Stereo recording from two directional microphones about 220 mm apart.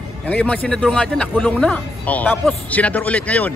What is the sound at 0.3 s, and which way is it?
Speech, 5° left (ahead or behind).